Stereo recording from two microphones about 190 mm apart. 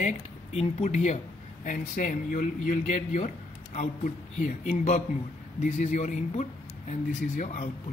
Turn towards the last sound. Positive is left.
turn(degrees=40)  # may be behind; listen again after turning